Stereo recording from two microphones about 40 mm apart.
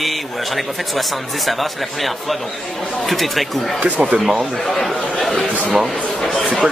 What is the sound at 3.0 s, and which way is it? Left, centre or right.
Speech, centre.